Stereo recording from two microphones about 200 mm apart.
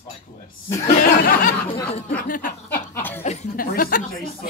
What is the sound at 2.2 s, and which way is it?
Speech, 40° left (ahead or behind).